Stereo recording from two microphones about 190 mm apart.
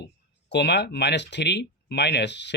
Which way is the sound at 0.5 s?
65° left (ahead or behind).